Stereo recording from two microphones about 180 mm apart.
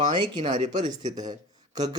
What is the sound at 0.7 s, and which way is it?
Speech, 40° right (ahead or behind).